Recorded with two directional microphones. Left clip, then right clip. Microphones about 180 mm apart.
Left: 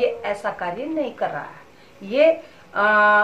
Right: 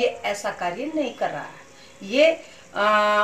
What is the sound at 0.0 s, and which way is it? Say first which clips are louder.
Speech: left 2 dB; 15° right (ahead or behind).